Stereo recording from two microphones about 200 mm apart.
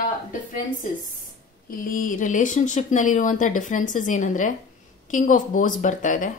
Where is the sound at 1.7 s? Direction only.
45° left (ahead or behind).